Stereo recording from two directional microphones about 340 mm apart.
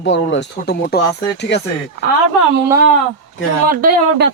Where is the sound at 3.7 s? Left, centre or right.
Right.